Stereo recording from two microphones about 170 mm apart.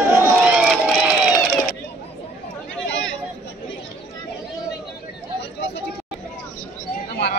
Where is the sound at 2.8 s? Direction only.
90° left.